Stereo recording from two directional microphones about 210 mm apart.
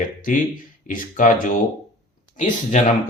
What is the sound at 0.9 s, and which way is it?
Speech, 35° left (ahead or behind).